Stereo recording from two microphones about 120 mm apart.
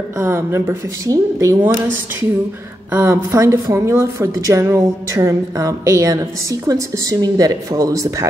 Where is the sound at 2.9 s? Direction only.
20° right (ahead or behind).